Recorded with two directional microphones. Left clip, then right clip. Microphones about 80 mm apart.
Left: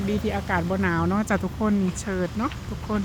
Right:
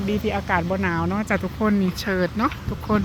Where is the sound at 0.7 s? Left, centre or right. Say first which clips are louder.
Right 1 dB; left.